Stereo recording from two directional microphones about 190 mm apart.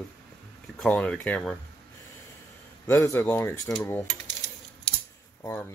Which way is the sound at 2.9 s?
15° left (ahead or behind).